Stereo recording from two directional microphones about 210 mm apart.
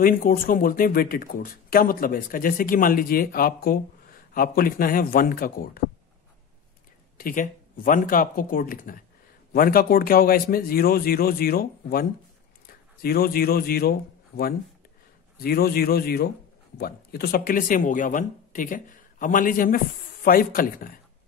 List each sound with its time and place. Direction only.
0.0 s speech: 45° left (ahead or behind)
7.2 s a man's voice: 45° left (ahead or behind)